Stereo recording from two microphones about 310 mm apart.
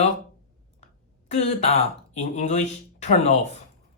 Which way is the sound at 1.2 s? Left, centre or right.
Centre.